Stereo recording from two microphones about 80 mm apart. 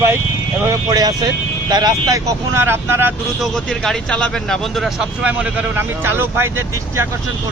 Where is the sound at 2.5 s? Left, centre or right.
Right.